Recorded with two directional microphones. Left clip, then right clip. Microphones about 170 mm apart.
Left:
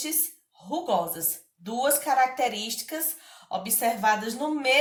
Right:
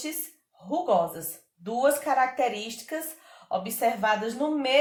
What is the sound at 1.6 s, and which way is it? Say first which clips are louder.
A woman's voice: right 2 dB; 40° right (ahead or behind).